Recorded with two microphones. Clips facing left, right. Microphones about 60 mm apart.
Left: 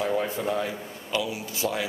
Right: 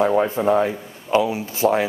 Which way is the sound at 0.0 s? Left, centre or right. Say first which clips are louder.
Right 9 dB; right.